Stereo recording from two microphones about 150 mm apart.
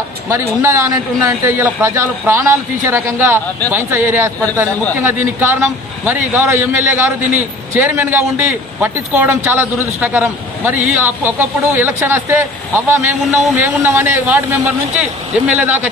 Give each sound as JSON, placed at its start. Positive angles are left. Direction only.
{"t": 0.3, "sound": "a man's voice", "side_deg": -20}